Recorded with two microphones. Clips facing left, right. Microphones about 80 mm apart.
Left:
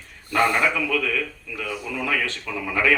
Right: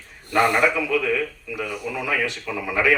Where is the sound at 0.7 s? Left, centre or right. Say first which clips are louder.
Right 2 dB; centre.